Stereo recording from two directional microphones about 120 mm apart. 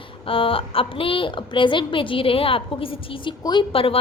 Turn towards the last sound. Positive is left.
turn(degrees=50)  # may be behind; listen again after turning